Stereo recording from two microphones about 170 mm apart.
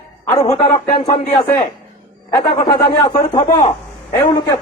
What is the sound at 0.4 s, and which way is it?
Speech, 40° left (ahead or behind).